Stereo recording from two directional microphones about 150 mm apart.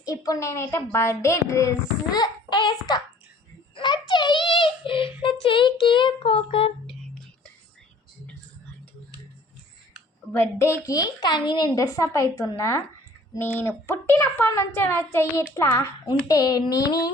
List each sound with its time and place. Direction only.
0.0 s a woman's voice: 20° left (ahead or behind); by 6.7 s 40° left (ahead or behind)
10.3 s a woman's voice: 15° left (ahead or behind)
16.3 s a woman's voice: 25° left (ahead or behind)